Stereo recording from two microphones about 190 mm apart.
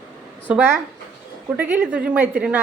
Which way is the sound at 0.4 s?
10° right (ahead or behind).